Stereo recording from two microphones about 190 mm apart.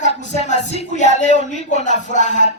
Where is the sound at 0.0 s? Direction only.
40° left (ahead or behind).